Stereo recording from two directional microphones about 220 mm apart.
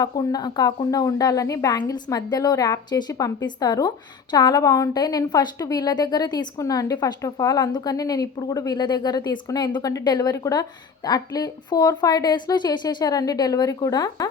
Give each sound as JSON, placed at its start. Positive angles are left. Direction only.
{"t": 0.0, "sound": "speech", "side_deg": 15}